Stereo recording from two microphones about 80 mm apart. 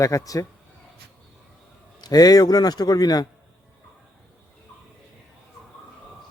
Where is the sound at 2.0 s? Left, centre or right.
Left.